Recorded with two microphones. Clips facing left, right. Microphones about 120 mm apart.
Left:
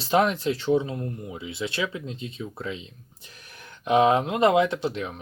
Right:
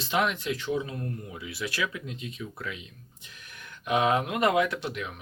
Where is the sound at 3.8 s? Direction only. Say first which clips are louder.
Left 5 dB; 30° left (ahead or behind).